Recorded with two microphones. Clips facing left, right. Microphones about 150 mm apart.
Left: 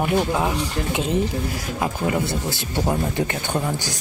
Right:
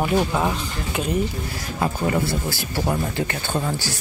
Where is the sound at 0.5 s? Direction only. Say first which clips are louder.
Left 3 dB; 20° left (ahead or behind).